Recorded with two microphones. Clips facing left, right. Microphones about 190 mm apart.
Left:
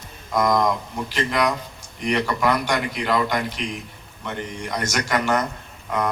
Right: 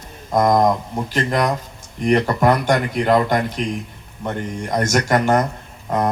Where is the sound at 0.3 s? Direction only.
45° right (ahead or behind).